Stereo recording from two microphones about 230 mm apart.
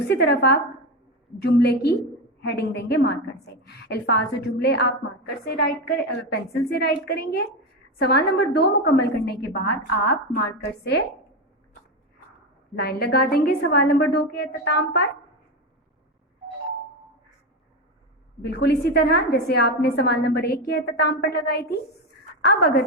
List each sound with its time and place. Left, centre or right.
0.1 s a woman's voice: left
12.7 s a woman's voice: left
18.4 s a woman's voice: left